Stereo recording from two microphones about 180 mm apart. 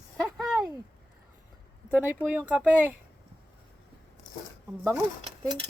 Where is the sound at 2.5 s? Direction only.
5° right (ahead or behind).